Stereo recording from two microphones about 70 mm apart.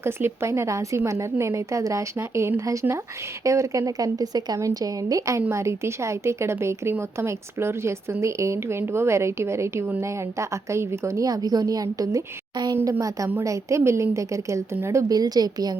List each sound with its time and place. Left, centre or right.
0.0 s a woman's voice: right
11.3 s a woman's voice: right
15.1 s a woman's voice: right